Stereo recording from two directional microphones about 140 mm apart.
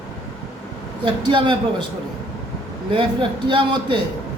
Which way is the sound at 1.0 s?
35° right (ahead or behind).